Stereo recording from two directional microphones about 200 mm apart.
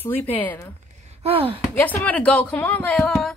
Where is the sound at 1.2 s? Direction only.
30° right (ahead or behind).